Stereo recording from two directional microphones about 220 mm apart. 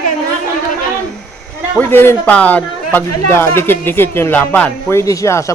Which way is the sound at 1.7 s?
10° left (ahead or behind).